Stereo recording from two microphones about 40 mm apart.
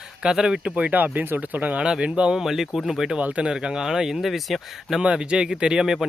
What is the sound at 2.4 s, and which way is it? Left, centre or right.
Speech, centre.